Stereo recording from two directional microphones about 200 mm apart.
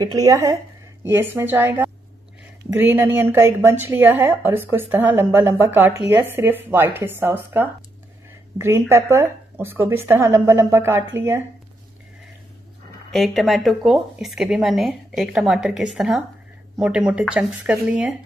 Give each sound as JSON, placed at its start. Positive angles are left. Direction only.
{"t": 0.0, "sound": "a woman's voice", "side_deg": -20}
{"t": 13.1, "sound": "a woman's voice", "side_deg": 0}